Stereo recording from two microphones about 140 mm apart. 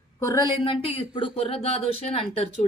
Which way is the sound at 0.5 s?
35° left (ahead or behind).